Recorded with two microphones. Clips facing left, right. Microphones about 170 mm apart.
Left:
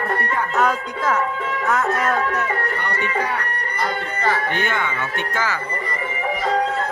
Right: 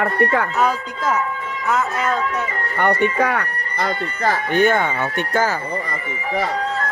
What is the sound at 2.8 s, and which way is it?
Speech, 60° right (ahead or behind).